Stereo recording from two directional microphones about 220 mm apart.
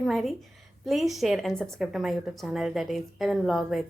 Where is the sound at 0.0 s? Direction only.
Centre (ahead or behind).